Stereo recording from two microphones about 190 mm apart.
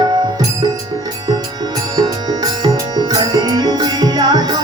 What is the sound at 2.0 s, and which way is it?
Music, 20° right (ahead or behind).